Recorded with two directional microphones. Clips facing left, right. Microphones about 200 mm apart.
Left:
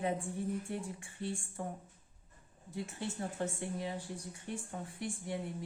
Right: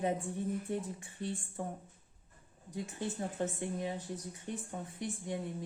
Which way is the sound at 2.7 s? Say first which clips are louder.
Right 1 dB; 15° right (ahead or behind).